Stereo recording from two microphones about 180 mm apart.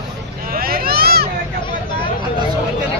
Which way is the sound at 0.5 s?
55° right (ahead or behind).